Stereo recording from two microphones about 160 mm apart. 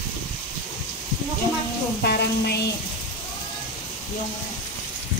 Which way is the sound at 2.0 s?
90° left.